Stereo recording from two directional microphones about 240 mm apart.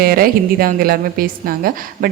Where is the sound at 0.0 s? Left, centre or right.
Right.